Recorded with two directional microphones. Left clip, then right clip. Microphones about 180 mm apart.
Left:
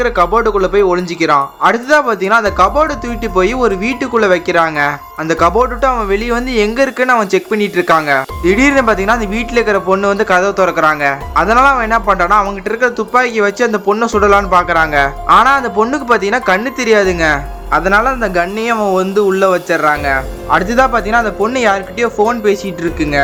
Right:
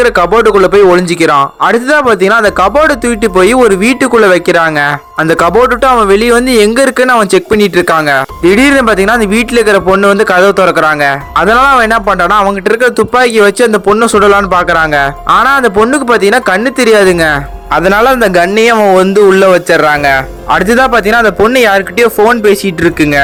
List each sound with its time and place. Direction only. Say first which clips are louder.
0.0 s a man's voice: right 5 dB; 45° right (ahead or behind)
17.7 s a man's voice: right 5 dB; 45° right (ahead or behind)